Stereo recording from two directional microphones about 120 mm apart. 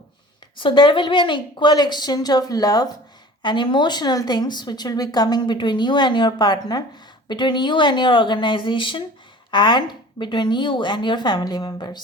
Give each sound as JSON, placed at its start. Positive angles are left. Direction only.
{"t": 0.6, "sound": "speech", "side_deg": 40}